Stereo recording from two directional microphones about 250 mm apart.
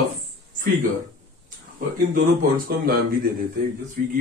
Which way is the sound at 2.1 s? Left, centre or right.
Right.